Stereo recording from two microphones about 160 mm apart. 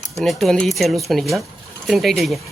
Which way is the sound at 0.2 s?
Centre (ahead or behind).